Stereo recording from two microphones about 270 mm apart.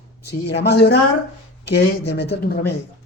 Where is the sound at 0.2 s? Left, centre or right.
Left.